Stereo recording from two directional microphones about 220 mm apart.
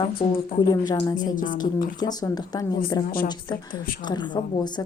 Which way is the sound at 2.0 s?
15° left (ahead or behind).